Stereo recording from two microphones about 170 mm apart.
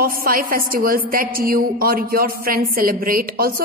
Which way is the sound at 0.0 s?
60° right (ahead or behind).